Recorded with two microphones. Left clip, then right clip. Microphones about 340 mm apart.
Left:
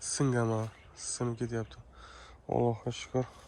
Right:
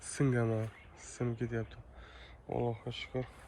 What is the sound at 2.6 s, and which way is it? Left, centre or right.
Speech, left.